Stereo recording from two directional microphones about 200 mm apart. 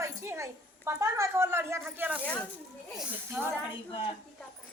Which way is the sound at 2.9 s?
10° right (ahead or behind).